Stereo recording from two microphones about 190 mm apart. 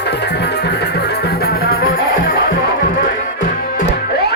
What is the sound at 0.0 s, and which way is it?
Music, 60° left (ahead or behind).